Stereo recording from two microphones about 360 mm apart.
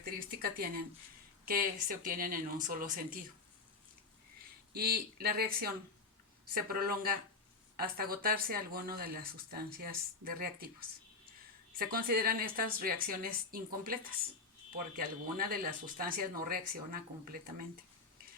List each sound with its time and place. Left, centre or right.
0.0 s speech: right
4.7 s speech: right
11.8 s speech: right